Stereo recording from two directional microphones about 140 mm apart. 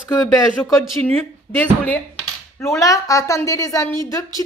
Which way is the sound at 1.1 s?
15° left (ahead or behind).